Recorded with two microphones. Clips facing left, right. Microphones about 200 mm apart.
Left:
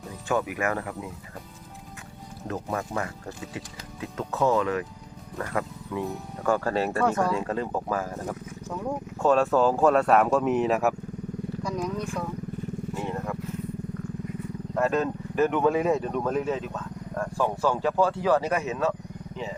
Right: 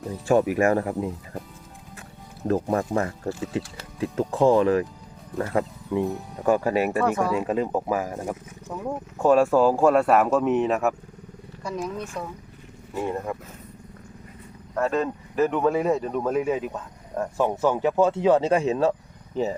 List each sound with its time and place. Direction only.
0.3 s speech: 35° right (ahead or behind)
2.5 s speech: 35° right (ahead or behind); by 11.9 s 5° right (ahead or behind)
14.8 s speech: centre (ahead or behind); by 19.5 s 40° right (ahead or behind)